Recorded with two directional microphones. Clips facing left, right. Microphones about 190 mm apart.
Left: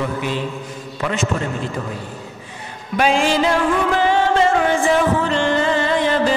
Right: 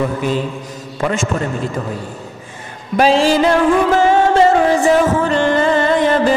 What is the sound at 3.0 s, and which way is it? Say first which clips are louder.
Music: right 5 dB; 35° right (ahead or behind).